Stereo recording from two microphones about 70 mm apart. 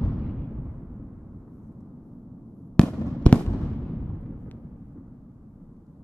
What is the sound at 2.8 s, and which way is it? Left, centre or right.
Fireworks, centre.